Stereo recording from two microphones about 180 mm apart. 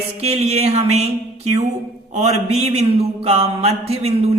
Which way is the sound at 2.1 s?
35° right (ahead or behind).